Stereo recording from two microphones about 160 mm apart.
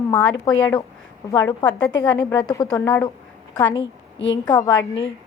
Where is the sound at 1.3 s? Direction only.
25° left (ahead or behind).